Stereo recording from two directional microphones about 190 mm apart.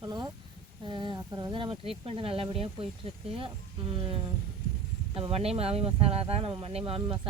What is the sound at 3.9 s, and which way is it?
Speech, 30° right (ahead or behind).